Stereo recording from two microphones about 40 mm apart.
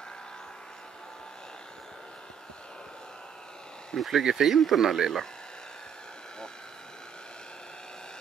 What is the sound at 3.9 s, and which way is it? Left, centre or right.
Speech, centre.